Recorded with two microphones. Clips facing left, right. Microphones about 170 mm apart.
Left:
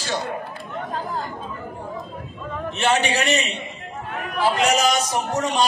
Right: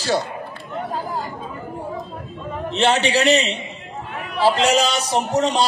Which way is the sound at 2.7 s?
35° right (ahead or behind).